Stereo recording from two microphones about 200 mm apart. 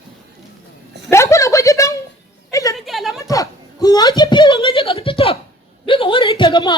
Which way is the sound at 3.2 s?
15° left (ahead or behind).